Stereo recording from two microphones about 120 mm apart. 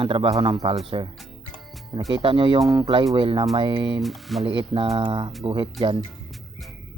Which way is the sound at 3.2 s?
45° right (ahead or behind).